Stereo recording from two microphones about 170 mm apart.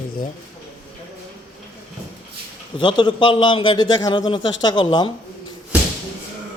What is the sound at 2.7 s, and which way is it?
A man's voice, 30° left (ahead or behind).